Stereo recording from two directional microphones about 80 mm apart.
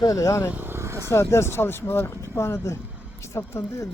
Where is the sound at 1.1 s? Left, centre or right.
Left.